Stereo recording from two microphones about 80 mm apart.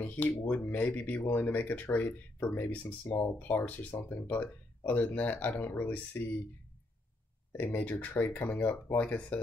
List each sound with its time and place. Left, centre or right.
0.0 s speech: left
7.5 s speech: left